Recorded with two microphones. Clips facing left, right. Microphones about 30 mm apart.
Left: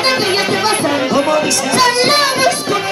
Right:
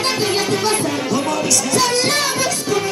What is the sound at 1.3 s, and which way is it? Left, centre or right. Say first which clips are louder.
Music: left 5 dB; left.